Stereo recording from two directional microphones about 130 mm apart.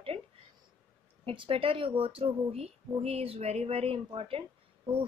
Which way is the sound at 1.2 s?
45° right (ahead or behind).